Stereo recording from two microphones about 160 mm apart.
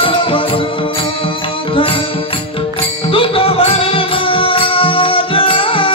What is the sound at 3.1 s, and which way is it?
Music, 35° left (ahead or behind).